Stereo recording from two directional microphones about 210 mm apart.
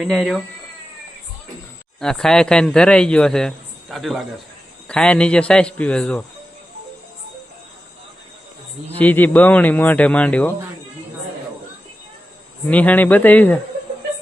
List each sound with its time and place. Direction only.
0.0 s a man's voice: centre (ahead or behind)
2.0 s a man's voice: centre (ahead or behind)
9.0 s speech: 10° left (ahead or behind)
12.6 s speech: 10° left (ahead or behind)